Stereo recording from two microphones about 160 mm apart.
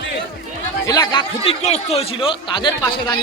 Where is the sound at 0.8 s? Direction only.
25° left (ahead or behind).